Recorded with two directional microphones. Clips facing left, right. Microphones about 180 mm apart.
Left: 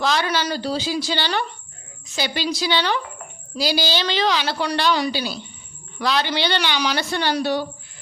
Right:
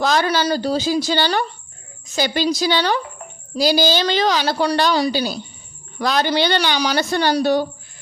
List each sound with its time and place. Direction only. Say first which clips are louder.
0.0 s a woman's voice: right 4 dB; 45° right (ahead or behind)